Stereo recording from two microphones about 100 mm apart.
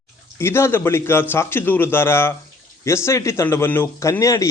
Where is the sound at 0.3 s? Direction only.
25° left (ahead or behind).